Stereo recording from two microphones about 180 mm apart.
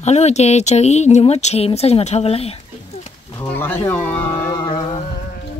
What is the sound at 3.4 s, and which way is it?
Speech, 10° left (ahead or behind).